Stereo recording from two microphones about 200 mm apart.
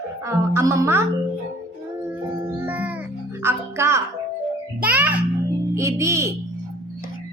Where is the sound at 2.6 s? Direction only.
10° right (ahead or behind).